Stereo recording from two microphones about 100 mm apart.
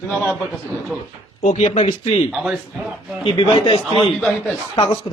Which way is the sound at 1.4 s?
90° left.